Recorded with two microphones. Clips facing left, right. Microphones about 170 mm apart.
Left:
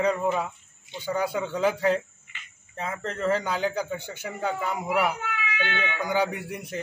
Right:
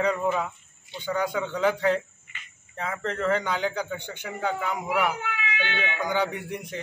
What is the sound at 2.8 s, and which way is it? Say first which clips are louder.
Speech: even; 30° left (ahead or behind).